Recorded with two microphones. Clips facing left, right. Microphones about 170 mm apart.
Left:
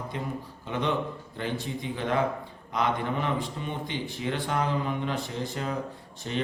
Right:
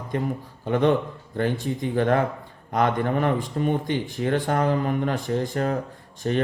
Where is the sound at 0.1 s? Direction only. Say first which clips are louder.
Right 12 dB; 50° right (ahead or behind).